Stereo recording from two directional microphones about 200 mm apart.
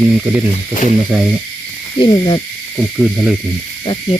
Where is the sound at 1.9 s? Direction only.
25° left (ahead or behind).